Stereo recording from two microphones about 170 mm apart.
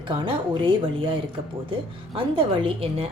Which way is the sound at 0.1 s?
30° right (ahead or behind).